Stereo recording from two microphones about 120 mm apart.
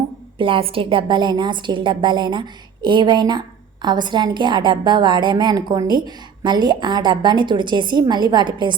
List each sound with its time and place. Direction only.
0.3 s a woman's voice: 45° right (ahead or behind)